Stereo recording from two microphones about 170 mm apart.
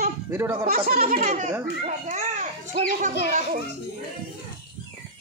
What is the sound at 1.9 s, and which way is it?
Children playing, 45° right (ahead or behind).